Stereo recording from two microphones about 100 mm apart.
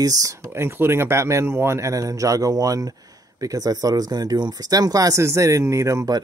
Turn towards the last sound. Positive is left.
turn(degrees=-35)  # may be behind; listen again after turning